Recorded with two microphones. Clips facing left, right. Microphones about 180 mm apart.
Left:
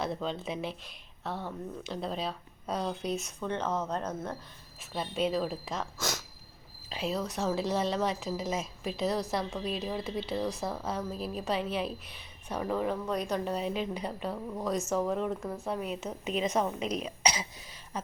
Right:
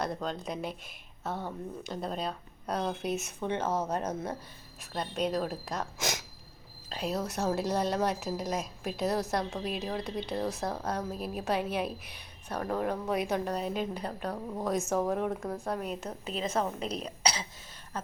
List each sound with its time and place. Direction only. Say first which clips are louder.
0.0 s a woman's voice: even; centre (ahead or behind); by 4.4 s 15° right (ahead or behind)
4.9 s a woman's voice: left 1 dB; 5° left (ahead or behind)
6.9 s a woman's voice: even; centre (ahead or behind)
12.7 s a woman's voice: right 1 dB; 10° right (ahead or behind)
13.5 s a woman's voice: even; 5° left (ahead or behind)
16.8 s speech: left 2 dB; 35° right (ahead or behind)
17.1 s cough: left 1 dB; 10° left (ahead or behind)